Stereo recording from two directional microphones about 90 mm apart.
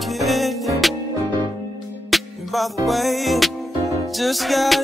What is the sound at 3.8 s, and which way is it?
Music, 35° right (ahead or behind).